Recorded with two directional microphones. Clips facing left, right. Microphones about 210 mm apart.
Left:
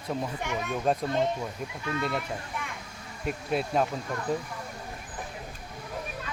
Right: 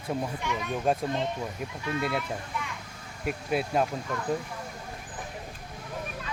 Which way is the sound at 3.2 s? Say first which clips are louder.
Even; 5° right (ahead or behind).